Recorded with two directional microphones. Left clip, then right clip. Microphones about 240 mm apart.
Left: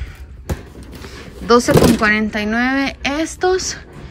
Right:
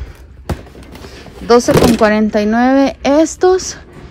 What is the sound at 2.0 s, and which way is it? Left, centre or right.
A woman's voice, centre.